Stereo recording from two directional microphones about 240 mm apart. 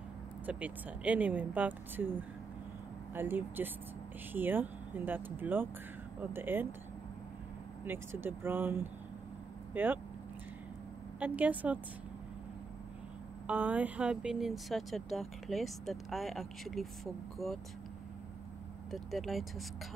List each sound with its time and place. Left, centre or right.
0.5 s speech: centre
7.8 s speech: centre
11.1 s speech: centre
13.5 s speech: centre
18.9 s speech: centre